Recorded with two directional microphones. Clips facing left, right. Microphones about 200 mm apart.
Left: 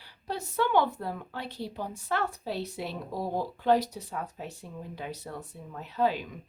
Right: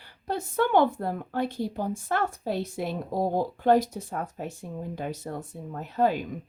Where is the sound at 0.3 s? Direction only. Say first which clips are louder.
Right 3 dB; 50° right (ahead or behind).